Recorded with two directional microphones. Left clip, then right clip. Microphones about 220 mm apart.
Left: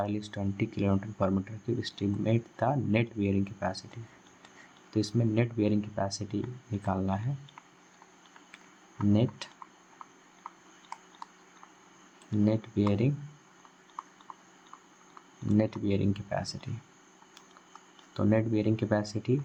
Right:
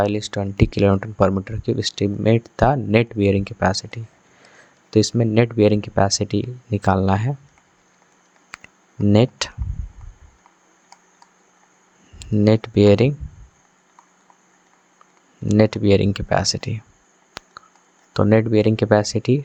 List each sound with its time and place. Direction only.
0.0 s speech: 40° right (ahead or behind)
9.1 s speech: 45° right (ahead or behind)
12.5 s speech: 40° right (ahead or behind)
15.4 s speech: 40° right (ahead or behind)
18.1 s speech: 40° right (ahead or behind)